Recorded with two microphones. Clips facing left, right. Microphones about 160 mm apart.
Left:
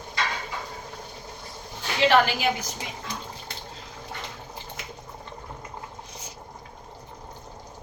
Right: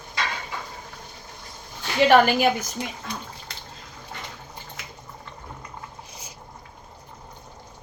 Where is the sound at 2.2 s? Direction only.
50° right (ahead or behind).